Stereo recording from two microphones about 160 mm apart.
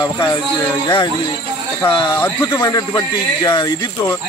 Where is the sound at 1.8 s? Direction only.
15° left (ahead or behind).